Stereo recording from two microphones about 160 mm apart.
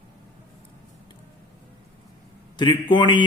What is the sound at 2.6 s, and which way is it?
Speech, 30° left (ahead or behind).